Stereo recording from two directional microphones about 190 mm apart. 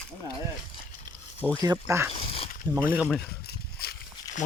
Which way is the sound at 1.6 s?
15° right (ahead or behind).